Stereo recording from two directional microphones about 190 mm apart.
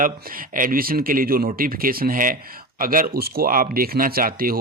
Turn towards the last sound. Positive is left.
turn(degrees=-50)  # may be behind; listen again after turning